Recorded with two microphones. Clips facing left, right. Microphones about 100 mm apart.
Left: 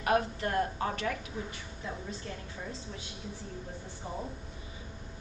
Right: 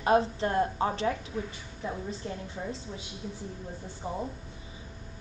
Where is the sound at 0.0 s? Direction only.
25° right (ahead or behind).